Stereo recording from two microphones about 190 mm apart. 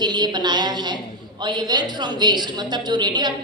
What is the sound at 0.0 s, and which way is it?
A woman's voice, 20° right (ahead or behind).